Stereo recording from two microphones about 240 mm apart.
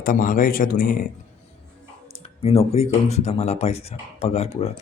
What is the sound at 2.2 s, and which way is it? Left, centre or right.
Speech, left.